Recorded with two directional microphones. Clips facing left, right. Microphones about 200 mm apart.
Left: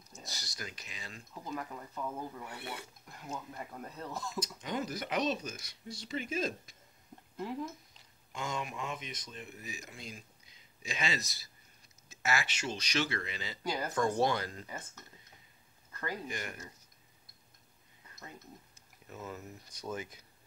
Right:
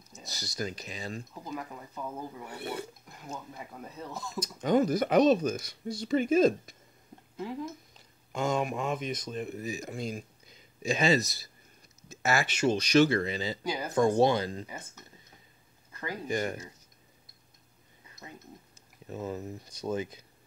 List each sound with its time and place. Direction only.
0.3 s speech: 40° right (ahead or behind)
1.3 s speech: 5° right (ahead or behind)
2.5 s speech: 40° right (ahead or behind)
3.1 s speech: 5° right (ahead or behind)
4.4 s speech: 50° right (ahead or behind)
8.3 s speech: 45° right (ahead or behind)
13.7 s speech: 5° right (ahead or behind)
13.9 s speech: 25° right (ahead or behind)
15.9 s a sound: 15° right (ahead or behind)
16.3 s speech: 40° right (ahead or behind)
19.0 s speech: 30° right (ahead or behind)